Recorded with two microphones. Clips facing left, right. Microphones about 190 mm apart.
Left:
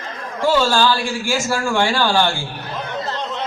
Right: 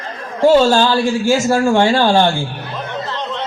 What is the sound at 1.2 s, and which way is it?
Speech, 20° right (ahead or behind).